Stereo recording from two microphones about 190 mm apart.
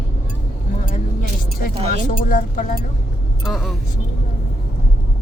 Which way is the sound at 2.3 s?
45° left (ahead or behind).